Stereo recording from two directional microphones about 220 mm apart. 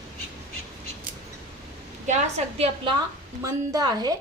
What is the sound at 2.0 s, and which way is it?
Speech, 30° right (ahead or behind).